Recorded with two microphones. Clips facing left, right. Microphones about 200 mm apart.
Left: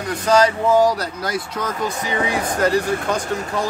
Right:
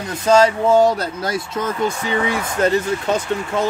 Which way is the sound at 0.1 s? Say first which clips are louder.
Right 2 dB; 25° right (ahead or behind).